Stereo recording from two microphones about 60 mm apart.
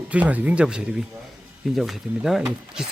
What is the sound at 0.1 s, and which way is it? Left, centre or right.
Speech, right.